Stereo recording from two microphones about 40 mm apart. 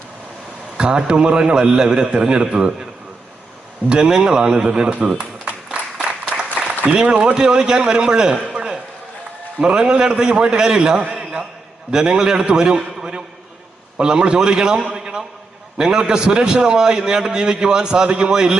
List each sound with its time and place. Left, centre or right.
0.8 s a man's voice: right
3.8 s a man's voice: right
5.7 s applause: right
6.6 s speech: right
7.5 s a man's voice: centre
8.5 s a sound: centre
9.6 s a man's voice: right
14.9 s a sound: right
15.8 s a man's voice: right